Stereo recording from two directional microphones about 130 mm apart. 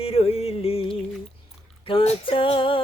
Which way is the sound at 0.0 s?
50° left (ahead or behind).